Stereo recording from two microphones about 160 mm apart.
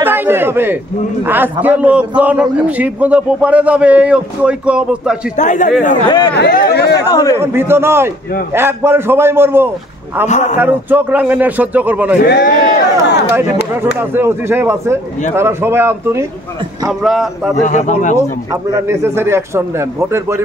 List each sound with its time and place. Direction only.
0.0 s a man's voice: 15° right (ahead or behind)
5.3 s speech: 50° left (ahead or behind)
6.0 s a man's voice: 30° left (ahead or behind)
6.3 s speech: 80° left
7.1 s a man's voice: 20° left (ahead or behind)
7.3 s a man's voice: 15° right (ahead or behind)
10.2 s speech: 45° left (ahead or behind)
10.6 s a man's voice: 10° right (ahead or behind)
12.2 s speech: 90° left; by 13.2 s 75° left (ahead or behind)
14.1 s a man's voice: 15° right (ahead or behind)
17.0 s speech: centre (ahead or behind)
17.6 s speech: 50° left (ahead or behind)
18.5 s a man's voice: 15° right (ahead or behind)